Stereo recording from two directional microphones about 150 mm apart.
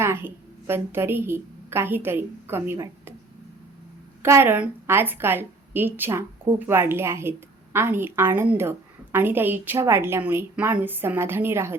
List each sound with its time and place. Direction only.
0.0 s a woman's voice: 15° right (ahead or behind)
4.2 s a woman's voice: 15° right (ahead or behind)